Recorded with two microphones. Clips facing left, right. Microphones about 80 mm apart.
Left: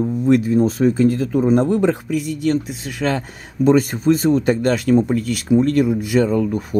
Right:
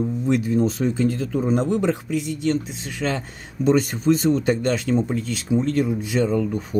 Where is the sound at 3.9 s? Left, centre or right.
Left.